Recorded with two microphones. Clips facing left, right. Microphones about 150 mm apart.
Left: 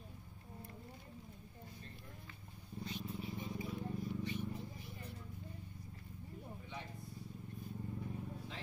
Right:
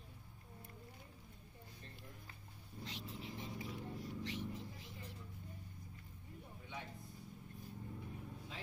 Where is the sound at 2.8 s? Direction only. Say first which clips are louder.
Left 5 dB; 90° right.